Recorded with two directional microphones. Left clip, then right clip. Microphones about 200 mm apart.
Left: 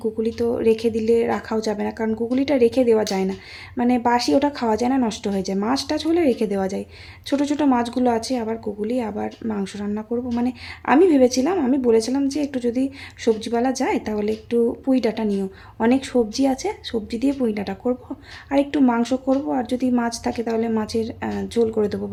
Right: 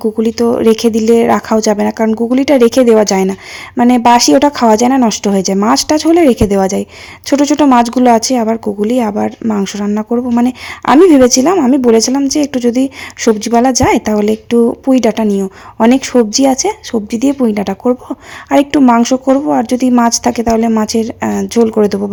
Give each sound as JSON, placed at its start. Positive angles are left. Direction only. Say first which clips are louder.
{"t": 0.0, "sound": "a woman's voice", "louder": "right 10 dB", "side_deg": -40}